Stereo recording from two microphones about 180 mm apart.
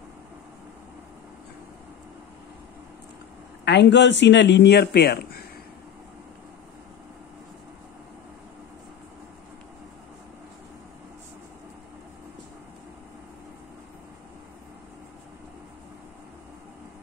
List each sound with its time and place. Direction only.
3.6 s speech: 75° left (ahead or behind); by 5.4 s 60° left (ahead or behind)